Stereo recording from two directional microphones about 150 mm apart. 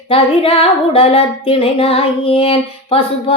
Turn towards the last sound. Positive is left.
turn(degrees=35)  # may be behind; listen again after turning